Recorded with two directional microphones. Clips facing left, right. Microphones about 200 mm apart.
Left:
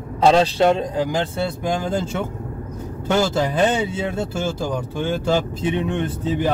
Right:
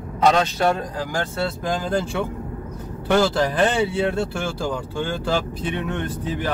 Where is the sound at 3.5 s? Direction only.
20° left (ahead or behind).